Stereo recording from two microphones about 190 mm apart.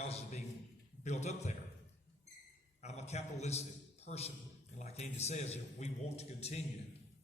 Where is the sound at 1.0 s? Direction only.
35° left (ahead or behind).